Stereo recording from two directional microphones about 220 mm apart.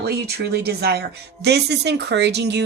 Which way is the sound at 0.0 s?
45° right (ahead or behind).